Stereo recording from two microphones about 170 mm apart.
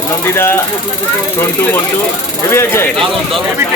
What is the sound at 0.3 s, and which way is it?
Speech, 15° left (ahead or behind).